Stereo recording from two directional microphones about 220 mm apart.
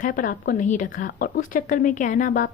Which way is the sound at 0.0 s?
35° left (ahead or behind).